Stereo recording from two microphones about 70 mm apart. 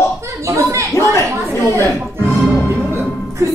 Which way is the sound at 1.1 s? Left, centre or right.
Left.